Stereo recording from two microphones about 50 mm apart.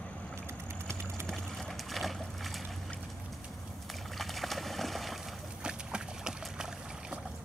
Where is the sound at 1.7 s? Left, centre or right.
Centre.